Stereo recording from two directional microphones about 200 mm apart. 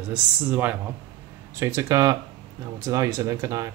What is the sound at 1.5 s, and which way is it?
Speech, 15° right (ahead or behind).